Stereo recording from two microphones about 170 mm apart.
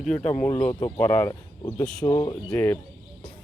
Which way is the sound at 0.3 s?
10° left (ahead or behind).